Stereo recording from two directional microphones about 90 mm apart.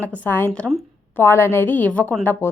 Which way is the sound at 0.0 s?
25° left (ahead or behind).